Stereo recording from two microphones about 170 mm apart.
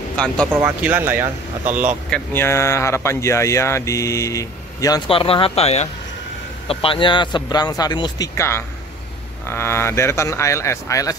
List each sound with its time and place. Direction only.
0.5 s speech: 10° right (ahead or behind)
2.0 s speech: 10° left (ahead or behind)